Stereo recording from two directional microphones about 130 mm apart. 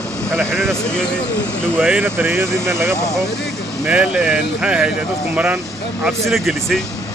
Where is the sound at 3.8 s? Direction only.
10° right (ahead or behind).